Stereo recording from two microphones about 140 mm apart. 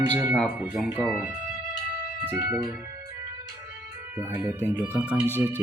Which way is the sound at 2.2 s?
15° right (ahead or behind).